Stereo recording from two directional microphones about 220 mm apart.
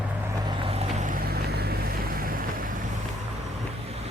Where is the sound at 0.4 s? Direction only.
25° right (ahead or behind).